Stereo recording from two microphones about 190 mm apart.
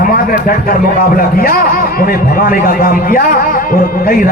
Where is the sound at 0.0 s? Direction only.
50° left (ahead or behind).